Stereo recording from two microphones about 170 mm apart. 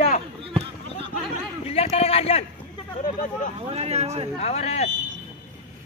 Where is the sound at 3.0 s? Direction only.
50° left (ahead or behind).